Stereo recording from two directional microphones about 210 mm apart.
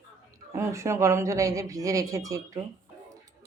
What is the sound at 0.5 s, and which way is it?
Speech, 10° right (ahead or behind).